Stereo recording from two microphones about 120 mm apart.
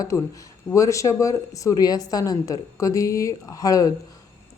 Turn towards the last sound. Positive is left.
turn(degrees=30)  # may be behind; listen again after turning